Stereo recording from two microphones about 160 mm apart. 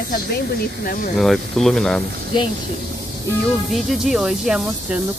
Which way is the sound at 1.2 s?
Centre (ahead or behind).